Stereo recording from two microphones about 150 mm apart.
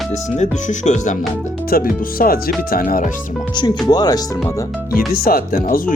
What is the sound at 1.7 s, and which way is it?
Speech, 70° left (ahead or behind).